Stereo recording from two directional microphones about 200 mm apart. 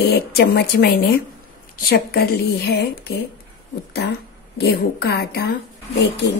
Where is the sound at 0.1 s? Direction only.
55° left (ahead or behind).